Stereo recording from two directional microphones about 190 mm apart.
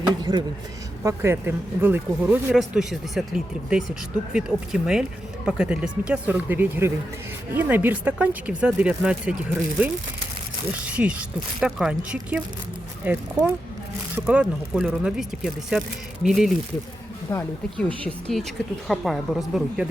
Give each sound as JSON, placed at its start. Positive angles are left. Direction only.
{"t": 0.2, "sound": "speech", "side_deg": -20}